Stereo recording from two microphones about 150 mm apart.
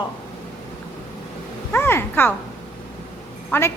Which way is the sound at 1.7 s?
15° left (ahead or behind).